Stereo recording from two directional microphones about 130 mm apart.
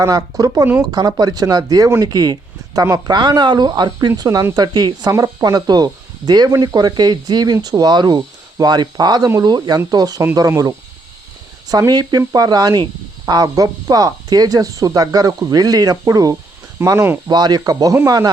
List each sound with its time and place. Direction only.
0.0 s speech: 25° right (ahead or behind)